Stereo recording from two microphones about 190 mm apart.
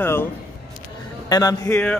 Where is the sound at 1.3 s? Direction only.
20° left (ahead or behind).